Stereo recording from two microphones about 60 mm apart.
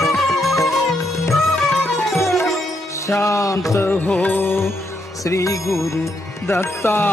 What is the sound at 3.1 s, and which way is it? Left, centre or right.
Music, left.